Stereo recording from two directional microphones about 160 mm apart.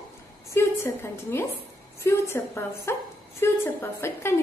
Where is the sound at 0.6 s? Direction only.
15° left (ahead or behind).